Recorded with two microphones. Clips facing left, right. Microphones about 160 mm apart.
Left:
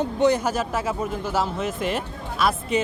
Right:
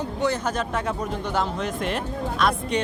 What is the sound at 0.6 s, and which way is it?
Speech, 5° left (ahead or behind).